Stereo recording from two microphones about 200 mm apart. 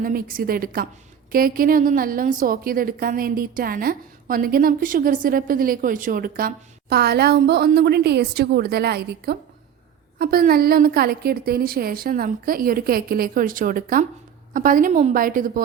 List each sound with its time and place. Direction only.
0.0 s a woman's voice: 45° right (ahead or behind)